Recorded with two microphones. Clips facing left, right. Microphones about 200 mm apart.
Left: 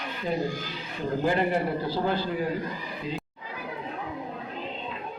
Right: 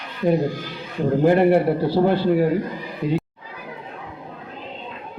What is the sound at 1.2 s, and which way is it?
A woman's voice, 60° right (ahead or behind).